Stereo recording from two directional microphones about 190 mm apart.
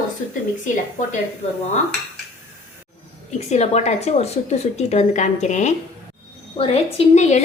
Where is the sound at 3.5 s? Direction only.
35° left (ahead or behind).